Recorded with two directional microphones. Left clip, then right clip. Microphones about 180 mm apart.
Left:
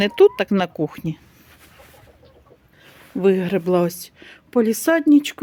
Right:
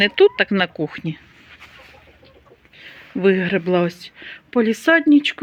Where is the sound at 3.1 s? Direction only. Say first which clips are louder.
Right 1 dB; centre (ahead or behind).